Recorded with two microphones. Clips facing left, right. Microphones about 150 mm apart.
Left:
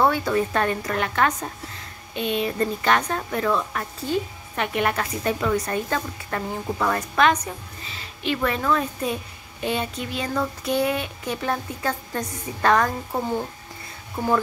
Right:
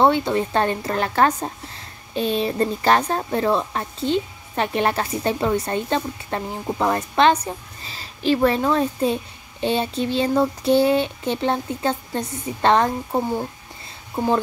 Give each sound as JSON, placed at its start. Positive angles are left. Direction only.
{"t": 0.0, "sound": "speech", "side_deg": -25}